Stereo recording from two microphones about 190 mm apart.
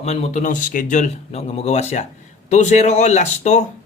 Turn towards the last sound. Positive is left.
turn(degrees=35)  # may be behind; listen again after turning